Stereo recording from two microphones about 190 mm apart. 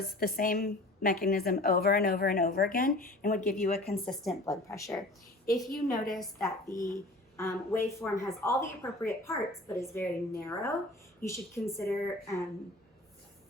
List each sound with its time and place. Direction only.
0.2 s a woman's voice: 50° left (ahead or behind); by 3.9 s 35° left (ahead or behind)
4.0 s a woman's voice: centre (ahead or behind)
4.4 s a woman's voice: 15° left (ahead or behind)
5.5 s a woman's voice: centre (ahead or behind)
6.7 s a woman's voice: 15° left (ahead or behind)